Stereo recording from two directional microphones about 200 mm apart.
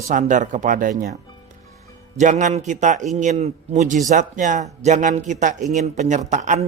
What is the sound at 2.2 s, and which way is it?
Speech, 40° right (ahead or behind).